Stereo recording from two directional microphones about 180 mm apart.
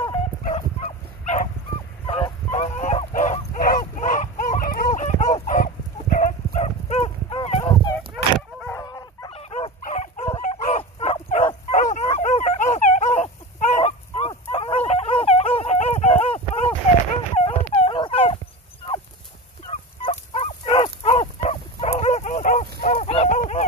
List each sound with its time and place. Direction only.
0.7 s dog: 40° left (ahead or behind)
2.0 s honk: 30° left (ahead or behind)
6.1 s dog: 40° left (ahead or behind)
8.1 s fowl: centre (ahead or behind)
8.7 s dog: 20° left (ahead or behind)
9.3 s dog: 35° left (ahead or behind)
19.7 s fowl: 35° left (ahead or behind)